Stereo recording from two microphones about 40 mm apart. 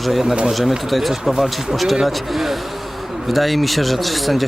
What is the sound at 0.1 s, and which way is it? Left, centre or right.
Speech, centre.